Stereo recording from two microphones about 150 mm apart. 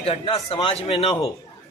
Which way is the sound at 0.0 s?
40° left (ahead or behind).